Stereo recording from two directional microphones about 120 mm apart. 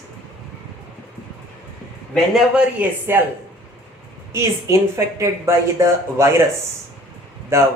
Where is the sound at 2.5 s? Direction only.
15° right (ahead or behind).